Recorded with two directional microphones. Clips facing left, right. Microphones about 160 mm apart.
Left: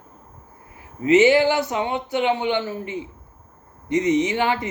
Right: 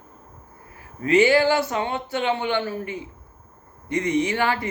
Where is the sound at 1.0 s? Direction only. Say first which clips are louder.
Left 2 dB; 20° left (ahead or behind).